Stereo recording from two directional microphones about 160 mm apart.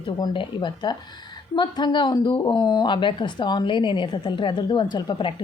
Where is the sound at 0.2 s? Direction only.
25° left (ahead or behind).